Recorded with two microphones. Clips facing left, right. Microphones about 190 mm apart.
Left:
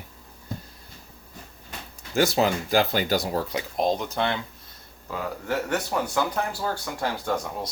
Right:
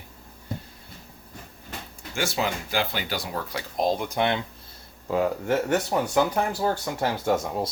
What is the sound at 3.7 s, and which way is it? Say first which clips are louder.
Speech: right 1 dB; 5° right (ahead or behind).